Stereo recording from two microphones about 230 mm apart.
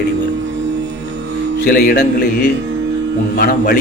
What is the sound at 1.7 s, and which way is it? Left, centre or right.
Speech, left.